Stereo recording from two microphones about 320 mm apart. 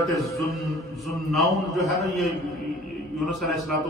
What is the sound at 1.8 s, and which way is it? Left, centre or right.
Speech, right.